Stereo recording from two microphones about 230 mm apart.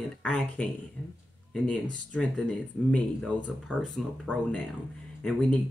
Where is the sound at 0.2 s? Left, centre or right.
Centre.